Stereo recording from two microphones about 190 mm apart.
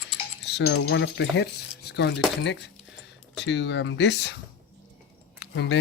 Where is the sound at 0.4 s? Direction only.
65° left (ahead or behind).